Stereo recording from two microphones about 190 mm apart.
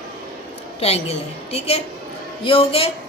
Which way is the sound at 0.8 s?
35° left (ahead or behind).